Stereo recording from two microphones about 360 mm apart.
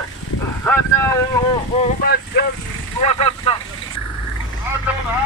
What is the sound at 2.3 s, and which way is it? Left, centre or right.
Speech, left.